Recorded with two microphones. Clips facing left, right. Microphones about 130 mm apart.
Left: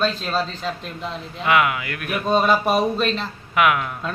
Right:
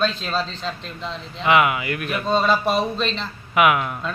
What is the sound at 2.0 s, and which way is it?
Speech, 10° left (ahead or behind).